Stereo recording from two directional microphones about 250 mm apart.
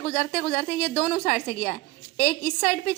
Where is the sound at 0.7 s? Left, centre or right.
Left.